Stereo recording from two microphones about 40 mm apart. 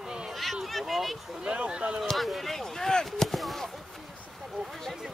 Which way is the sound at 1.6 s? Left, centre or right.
Right.